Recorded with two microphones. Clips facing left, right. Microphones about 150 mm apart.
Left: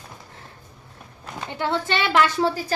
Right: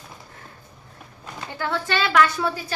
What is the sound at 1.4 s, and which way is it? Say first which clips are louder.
A woman's voice: left 2 dB; 20° left (ahead or behind).